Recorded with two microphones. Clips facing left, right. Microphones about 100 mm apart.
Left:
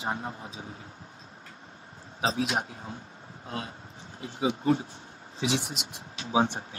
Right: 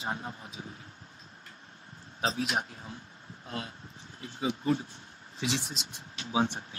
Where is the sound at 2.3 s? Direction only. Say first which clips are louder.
Left 3 dB; 40° left (ahead or behind).